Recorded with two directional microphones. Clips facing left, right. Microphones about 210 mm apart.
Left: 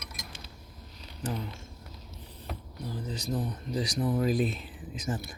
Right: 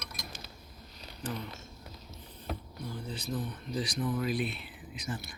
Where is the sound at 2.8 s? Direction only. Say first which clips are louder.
Left 3 dB; 40° left (ahead or behind).